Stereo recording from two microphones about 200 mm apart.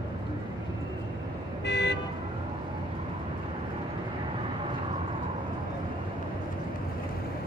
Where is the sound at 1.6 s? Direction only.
60° left (ahead or behind).